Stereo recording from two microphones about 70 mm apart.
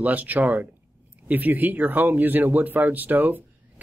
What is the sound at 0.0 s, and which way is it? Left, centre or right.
Speech, right.